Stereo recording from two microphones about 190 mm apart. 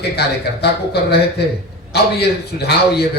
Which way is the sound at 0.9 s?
60° left (ahead or behind).